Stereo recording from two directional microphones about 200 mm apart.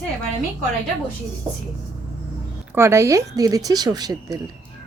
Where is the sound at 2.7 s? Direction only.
15° right (ahead or behind).